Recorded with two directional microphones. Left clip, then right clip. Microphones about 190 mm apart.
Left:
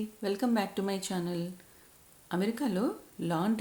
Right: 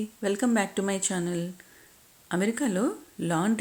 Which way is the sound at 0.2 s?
30° right (ahead or behind).